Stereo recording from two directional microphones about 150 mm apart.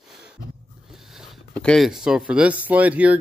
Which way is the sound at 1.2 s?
5° left (ahead or behind).